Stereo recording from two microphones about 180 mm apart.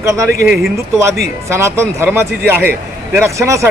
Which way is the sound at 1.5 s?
15° right (ahead or behind).